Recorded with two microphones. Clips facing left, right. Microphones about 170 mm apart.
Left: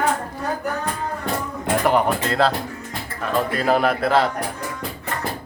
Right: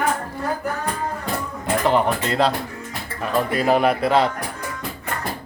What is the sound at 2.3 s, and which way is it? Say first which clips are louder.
A man's voice: even; centre (ahead or behind).